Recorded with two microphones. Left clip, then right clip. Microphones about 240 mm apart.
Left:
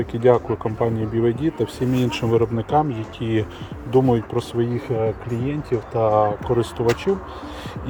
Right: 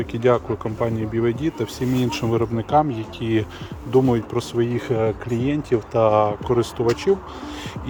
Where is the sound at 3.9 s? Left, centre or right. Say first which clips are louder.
Even; centre.